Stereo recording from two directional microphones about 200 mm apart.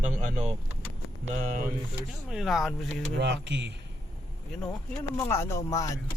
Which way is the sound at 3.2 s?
60° right (ahead or behind).